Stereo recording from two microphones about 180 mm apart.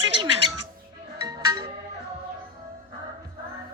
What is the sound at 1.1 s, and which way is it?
Music, 25° right (ahead or behind).